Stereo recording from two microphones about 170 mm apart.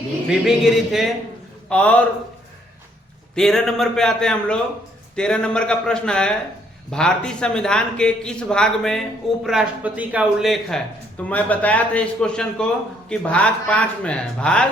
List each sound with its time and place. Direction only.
0.3 s a man's voice: centre (ahead or behind)
3.3 s a man's voice: 5° left (ahead or behind)